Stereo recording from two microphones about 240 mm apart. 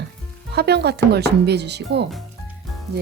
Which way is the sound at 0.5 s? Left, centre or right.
Right.